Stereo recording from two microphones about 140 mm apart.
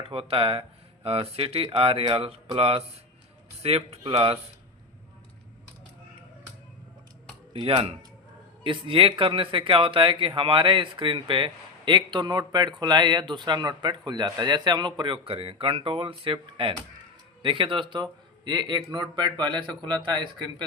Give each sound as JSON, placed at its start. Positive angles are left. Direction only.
{"t": 0.1, "sound": "speech", "side_deg": -45}
{"t": 7.5, "sound": "a man's voice", "side_deg": -40}